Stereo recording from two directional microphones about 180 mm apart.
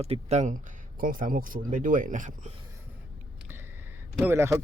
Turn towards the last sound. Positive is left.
turn(degrees=-15)  # may be behind; listen again after turning